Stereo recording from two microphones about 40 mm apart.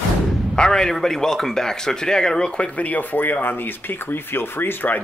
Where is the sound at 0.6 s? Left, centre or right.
Centre; by 3.3 s left.